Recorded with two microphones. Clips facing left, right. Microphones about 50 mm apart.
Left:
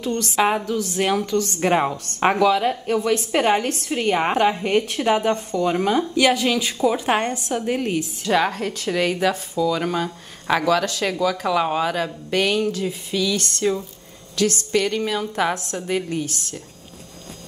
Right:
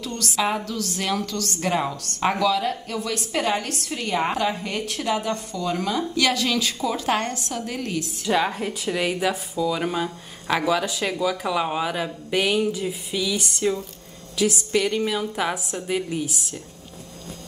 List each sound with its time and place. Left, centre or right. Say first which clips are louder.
0.0 s a woman's voice: left 5 dB; left
8.5 s a woman's voice: left 2 dB; centre